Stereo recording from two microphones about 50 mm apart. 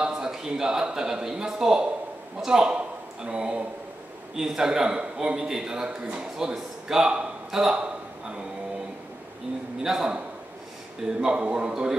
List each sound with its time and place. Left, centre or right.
0.0 s a man's voice: centre
7.0 s a sound: centre
9.8 s a man's voice: centre